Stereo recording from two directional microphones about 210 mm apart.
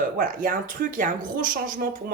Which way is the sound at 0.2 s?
40° right (ahead or behind).